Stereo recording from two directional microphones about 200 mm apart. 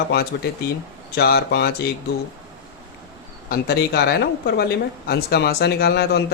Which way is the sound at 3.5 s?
50° left (ahead or behind).